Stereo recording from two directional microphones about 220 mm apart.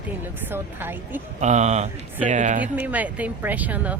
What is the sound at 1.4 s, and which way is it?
Speech, 30° right (ahead or behind).